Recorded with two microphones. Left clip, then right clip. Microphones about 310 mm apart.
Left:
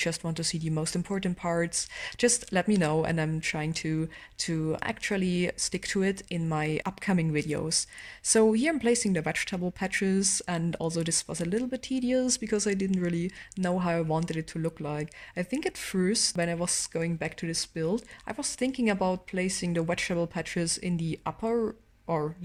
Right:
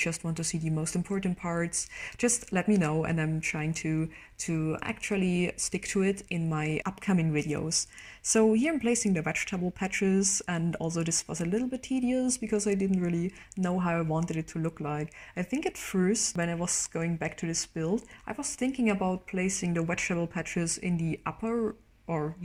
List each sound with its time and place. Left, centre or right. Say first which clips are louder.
0.0 s speech: left 2 dB; left
12.2 s speech: left 2 dB; left
12.5 s speech: even; left